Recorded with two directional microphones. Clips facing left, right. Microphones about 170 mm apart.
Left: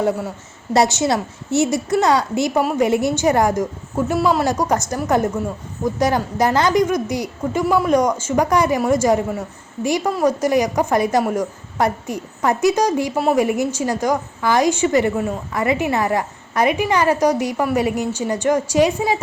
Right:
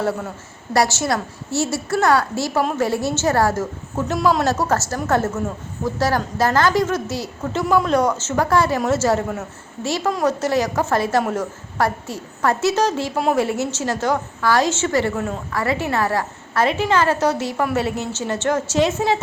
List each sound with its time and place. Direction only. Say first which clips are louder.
0.7 s a woman's voice: left 3 dB; 20° left (ahead or behind)